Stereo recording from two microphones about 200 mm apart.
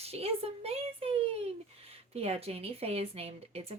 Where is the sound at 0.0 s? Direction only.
30° right (ahead or behind).